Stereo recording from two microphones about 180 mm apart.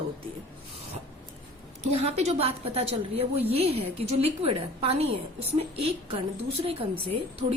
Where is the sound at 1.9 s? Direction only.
35° right (ahead or behind).